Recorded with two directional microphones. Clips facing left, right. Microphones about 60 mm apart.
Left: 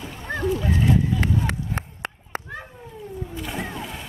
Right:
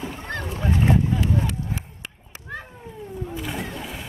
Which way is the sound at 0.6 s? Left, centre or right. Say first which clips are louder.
Right 5 dB; right.